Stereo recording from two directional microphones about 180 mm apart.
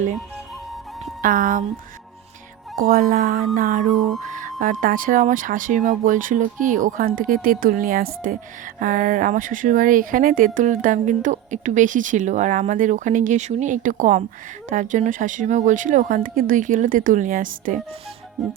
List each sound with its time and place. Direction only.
1.2 s speech: 50° right (ahead or behind)
2.7 s speech: 55° right (ahead or behind)
3.9 s music: centre (ahead or behind)
4.2 s speech: 45° right (ahead or behind)
18.4 s music: centre (ahead or behind)